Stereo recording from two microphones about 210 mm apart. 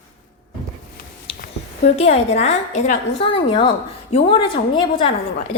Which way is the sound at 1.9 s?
30° left (ahead or behind).